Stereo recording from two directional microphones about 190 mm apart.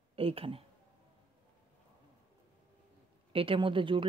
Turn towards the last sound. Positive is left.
turn(degrees=-25)  # may be behind; listen again after turning